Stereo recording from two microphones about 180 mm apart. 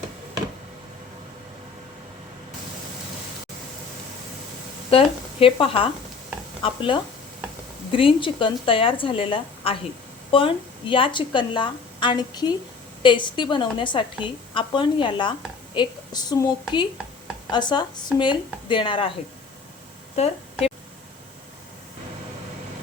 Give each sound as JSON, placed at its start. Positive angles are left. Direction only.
{"t": 4.9, "sound": "a woman's voice", "side_deg": 30}
{"t": 20.1, "sound": "a woman's voice", "side_deg": 35}